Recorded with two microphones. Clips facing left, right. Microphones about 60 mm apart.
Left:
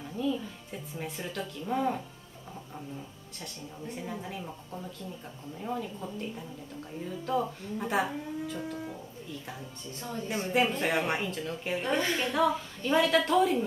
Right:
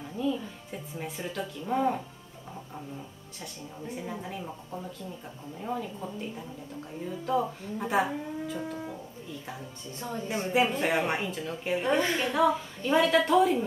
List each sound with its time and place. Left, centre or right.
0.0 s speech: centre
3.8 s speech: centre